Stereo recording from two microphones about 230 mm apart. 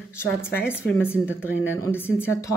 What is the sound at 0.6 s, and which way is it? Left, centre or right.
Speech, centre.